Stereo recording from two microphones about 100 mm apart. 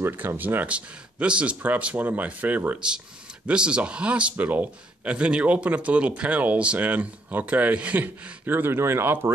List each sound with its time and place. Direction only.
0.0 s a man's voice: 20° right (ahead or behind)